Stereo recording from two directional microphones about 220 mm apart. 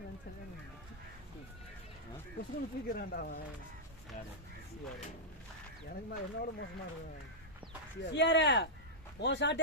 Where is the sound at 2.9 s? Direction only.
45° left (ahead or behind).